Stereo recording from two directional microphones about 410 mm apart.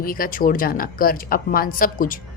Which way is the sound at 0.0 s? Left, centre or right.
Left.